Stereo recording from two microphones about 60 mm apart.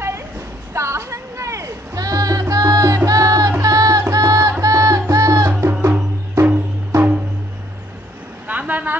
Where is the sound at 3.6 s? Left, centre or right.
Right.